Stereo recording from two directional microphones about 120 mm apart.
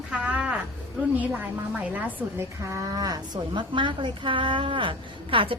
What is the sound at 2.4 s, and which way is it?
A woman's voice, 25° right (ahead or behind).